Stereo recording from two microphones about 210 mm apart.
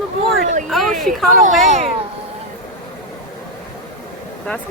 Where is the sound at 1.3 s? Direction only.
40° right (ahead or behind).